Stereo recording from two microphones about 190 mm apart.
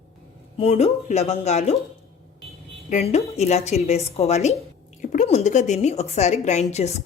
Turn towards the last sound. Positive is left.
turn(degrees=35)  # may be behind; listen again after turning